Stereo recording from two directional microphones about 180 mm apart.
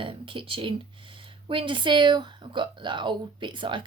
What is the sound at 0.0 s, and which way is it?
Speech, 30° right (ahead or behind).